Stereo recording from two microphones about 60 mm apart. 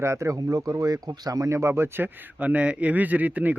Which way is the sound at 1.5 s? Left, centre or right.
Right.